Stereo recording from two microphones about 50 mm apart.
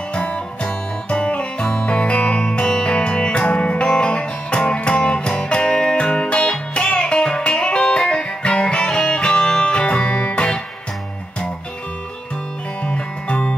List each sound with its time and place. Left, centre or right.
0.1 s music: centre
12.8 s music: left